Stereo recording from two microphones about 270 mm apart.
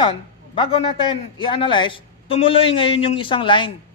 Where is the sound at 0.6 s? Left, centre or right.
Centre.